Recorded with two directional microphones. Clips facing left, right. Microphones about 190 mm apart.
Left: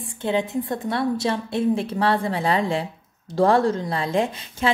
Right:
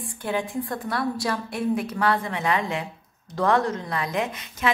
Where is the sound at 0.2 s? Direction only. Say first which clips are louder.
Left 4 dB; 20° left (ahead or behind).